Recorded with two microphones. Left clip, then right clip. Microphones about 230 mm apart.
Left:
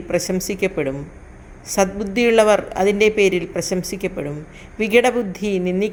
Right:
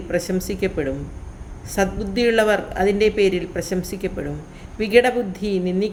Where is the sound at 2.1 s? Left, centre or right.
Centre.